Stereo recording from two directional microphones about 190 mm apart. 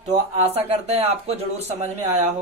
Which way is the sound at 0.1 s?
35° right (ahead or behind).